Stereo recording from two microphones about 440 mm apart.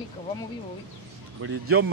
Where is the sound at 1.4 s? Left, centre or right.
Right.